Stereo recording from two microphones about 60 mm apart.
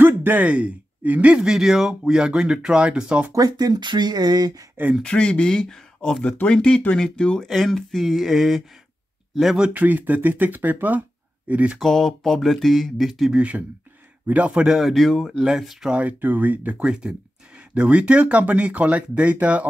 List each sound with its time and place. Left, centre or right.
0.0 s a man's voice: right; by 3.3 s centre
3.3 s speech: right
5.0 s speech: centre
7.4 s speech: centre
9.8 s speech: right
11.8 s speech: centre
13.3 s speech: right
14.7 s a man's voice: centre
15.9 s speech: right
16.8 s a man's voice: centre